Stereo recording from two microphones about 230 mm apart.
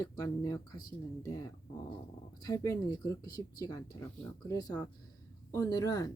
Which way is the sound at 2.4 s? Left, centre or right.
Centre.